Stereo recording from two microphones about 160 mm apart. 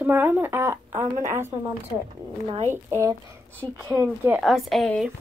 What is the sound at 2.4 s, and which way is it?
Speech, 35° right (ahead or behind).